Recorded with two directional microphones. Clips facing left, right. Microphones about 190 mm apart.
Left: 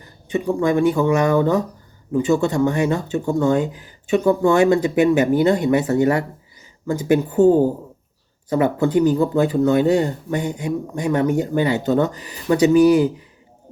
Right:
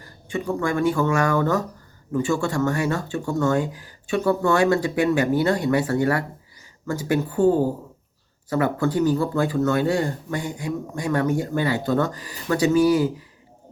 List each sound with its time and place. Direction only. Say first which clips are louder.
0.0 s speech: left 5 dB; 20° left (ahead or behind)